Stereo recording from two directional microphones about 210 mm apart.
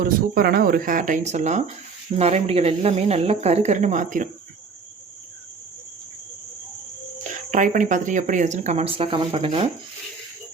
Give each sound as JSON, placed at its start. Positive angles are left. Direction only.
{"t": 0.0, "sound": "speech", "side_deg": -45}
{"t": 7.5, "sound": "speech", "side_deg": -35}